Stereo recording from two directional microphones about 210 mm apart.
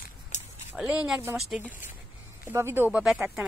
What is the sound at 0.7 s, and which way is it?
A woman's voice, 5° right (ahead or behind).